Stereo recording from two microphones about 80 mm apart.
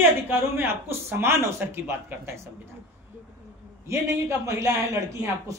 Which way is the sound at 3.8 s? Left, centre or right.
Right.